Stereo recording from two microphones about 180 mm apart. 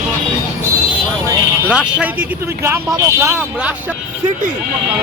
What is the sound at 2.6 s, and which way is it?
Speech, 15° right (ahead or behind).